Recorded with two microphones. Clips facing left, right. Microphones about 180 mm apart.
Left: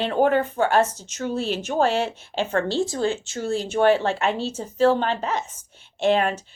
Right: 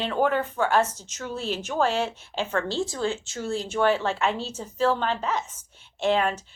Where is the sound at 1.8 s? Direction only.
65° left (ahead or behind).